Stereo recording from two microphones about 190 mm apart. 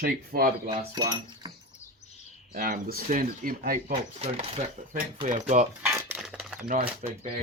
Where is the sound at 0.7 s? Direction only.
20° right (ahead or behind).